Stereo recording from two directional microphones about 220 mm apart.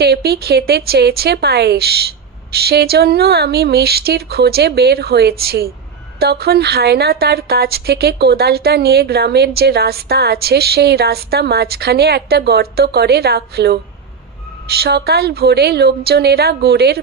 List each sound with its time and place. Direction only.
0.0 s a woman's voice: 45° right (ahead or behind)